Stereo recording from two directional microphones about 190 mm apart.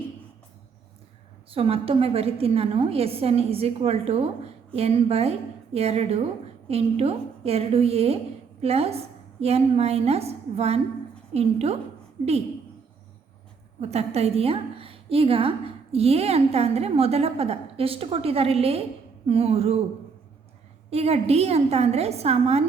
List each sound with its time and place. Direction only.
1.5 s a woman's voice: 30° right (ahead or behind)
13.8 s a woman's voice: 35° right (ahead or behind)
20.9 s a woman's voice: 35° right (ahead or behind)